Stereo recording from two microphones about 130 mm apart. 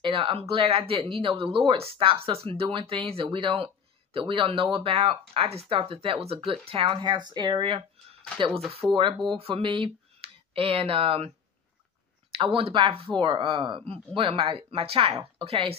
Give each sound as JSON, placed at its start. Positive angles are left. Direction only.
{"t": 0.0, "sound": "speech", "side_deg": -40}
{"t": 8.5, "sound": "speech", "side_deg": 0}
{"t": 9.3, "sound": "speech", "side_deg": -40}